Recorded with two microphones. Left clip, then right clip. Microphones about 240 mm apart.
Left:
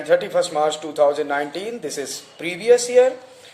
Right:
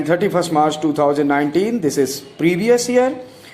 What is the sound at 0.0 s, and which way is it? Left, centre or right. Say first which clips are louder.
A man's voice: right 1 dB; centre.